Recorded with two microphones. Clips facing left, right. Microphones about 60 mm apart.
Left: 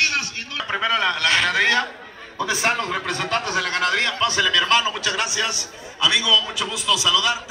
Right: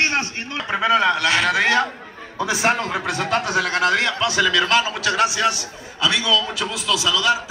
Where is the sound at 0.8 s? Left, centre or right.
Right.